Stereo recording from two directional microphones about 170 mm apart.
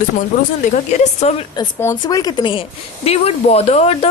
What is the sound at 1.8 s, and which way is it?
Speech, 20° left (ahead or behind).